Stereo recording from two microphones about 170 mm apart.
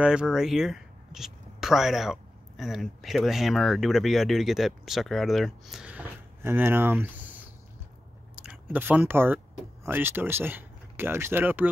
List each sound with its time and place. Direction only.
0.0 s speech: 5° right (ahead or behind)
8.4 s speech: 10° right (ahead or behind)